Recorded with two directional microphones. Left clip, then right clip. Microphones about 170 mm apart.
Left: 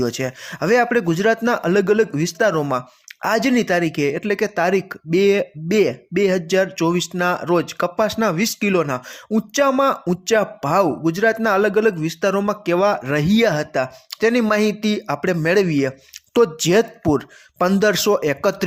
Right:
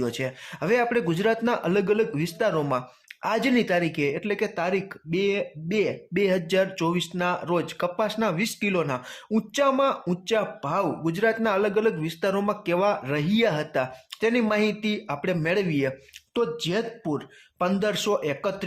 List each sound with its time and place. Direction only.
0.0 s speech: 25° left (ahead or behind)
16.3 s speech: 45° left (ahead or behind)